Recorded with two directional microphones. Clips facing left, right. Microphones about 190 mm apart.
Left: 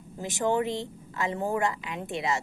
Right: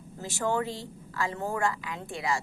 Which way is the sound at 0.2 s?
20° left (ahead or behind).